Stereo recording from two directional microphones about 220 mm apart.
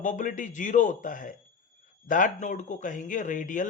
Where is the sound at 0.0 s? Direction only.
35° left (ahead or behind).